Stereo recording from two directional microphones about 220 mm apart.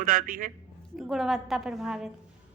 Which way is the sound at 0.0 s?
40° right (ahead or behind).